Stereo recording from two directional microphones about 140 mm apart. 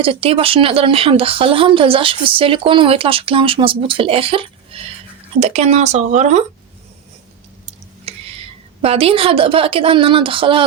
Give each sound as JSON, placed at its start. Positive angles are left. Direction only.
{"t": 0.0, "sound": "speech", "side_deg": -40}
{"t": 8.0, "sound": "speech", "side_deg": -45}